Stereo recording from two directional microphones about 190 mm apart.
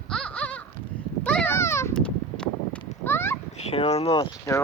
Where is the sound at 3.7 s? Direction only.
35° left (ahead or behind).